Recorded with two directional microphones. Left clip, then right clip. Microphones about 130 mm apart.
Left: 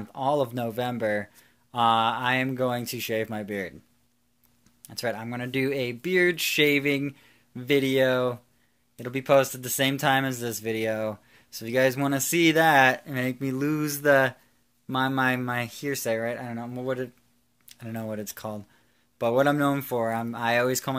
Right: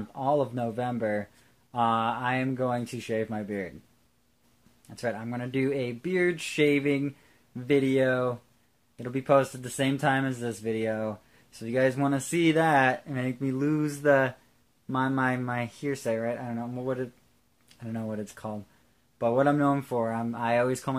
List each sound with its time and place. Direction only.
0.1 s speech: 20° left (ahead or behind)
4.8 s speech: 20° left (ahead or behind)